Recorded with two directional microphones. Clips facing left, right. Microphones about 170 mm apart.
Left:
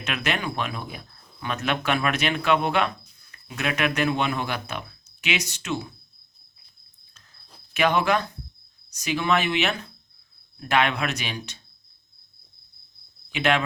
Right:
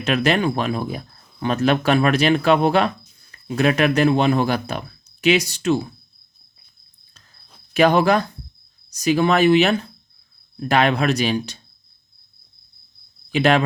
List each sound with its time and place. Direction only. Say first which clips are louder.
0.0 s speech: right 9 dB; 35° right (ahead or behind)
7.7 s speech: right 6 dB; 35° right (ahead or behind)
13.3 s speech: right 6 dB; 35° right (ahead or behind)